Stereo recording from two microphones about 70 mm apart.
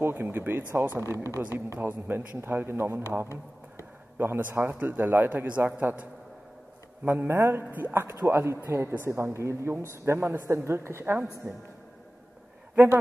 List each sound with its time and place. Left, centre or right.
0.0 s a woman's voice: right
7.1 s a woman's voice: right
12.7 s a man's voice: right